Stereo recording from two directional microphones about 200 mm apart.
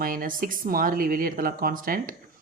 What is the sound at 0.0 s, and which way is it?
A woman's voice, 45° right (ahead or behind).